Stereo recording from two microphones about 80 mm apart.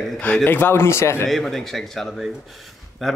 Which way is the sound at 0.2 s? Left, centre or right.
Centre.